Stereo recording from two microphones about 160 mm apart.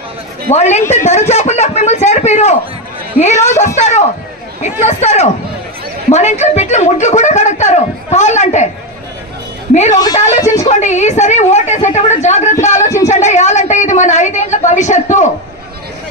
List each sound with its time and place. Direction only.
0.5 s a woman's voice: 45° left (ahead or behind)
9.9 s speech: 25° left (ahead or behind)
10.6 s a woman's voice: 45° left (ahead or behind)